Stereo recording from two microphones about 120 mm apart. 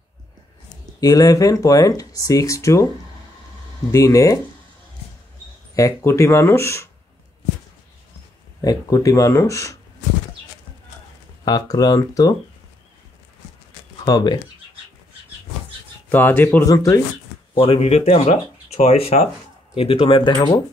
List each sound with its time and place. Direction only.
1.0 s speech: 30° left (ahead or behind)
3.9 s speech: 25° left (ahead or behind)
5.8 s speech: 25° left (ahead or behind)
8.5 s speech: 30° left (ahead or behind)
11.4 s speech: 30° left (ahead or behind)
14.0 s speech: 35° left (ahead or behind)
16.1 s speech: 15° left (ahead or behind)
16.6 s speech: 30° left (ahead or behind)
17.6 s speech: 50° left (ahead or behind)